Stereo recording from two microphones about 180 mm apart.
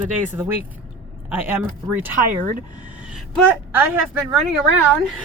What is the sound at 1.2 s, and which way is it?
Speech, 10° right (ahead or behind).